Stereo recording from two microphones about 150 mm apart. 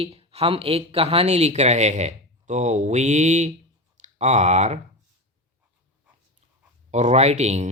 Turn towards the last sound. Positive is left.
turn(degrees=-45)  # may be behind; listen again after turning